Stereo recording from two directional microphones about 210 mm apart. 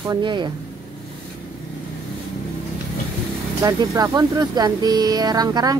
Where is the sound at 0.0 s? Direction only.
20° right (ahead or behind).